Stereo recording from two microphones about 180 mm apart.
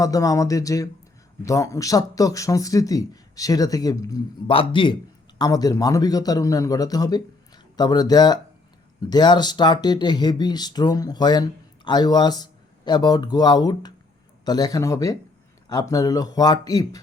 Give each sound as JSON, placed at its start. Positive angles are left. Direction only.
{"t": 0.0, "sound": "speech", "side_deg": 20}